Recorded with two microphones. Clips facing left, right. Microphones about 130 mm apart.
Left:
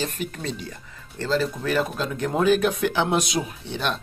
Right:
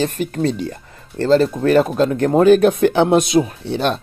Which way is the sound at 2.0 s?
60° right (ahead or behind).